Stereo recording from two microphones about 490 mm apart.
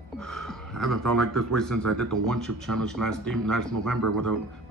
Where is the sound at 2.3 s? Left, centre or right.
Centre.